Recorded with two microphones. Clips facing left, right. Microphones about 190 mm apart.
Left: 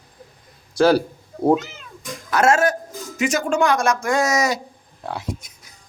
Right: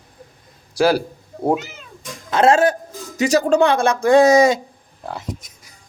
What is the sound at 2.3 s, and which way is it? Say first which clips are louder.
Speech: right 3 dB; 30° right (ahead or behind).